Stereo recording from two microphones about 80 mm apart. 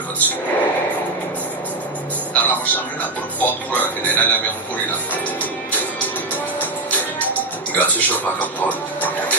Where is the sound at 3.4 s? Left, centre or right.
Left.